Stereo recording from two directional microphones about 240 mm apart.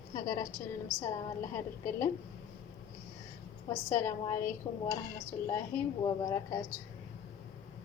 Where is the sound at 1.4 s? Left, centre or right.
Left.